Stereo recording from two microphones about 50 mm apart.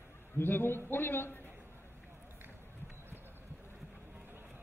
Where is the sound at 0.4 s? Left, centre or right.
Left.